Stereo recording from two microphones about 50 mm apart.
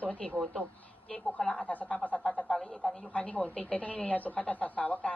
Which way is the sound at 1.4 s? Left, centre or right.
Centre.